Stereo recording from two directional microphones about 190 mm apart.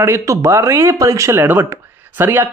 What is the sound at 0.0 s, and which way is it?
Speech, 15° right (ahead or behind).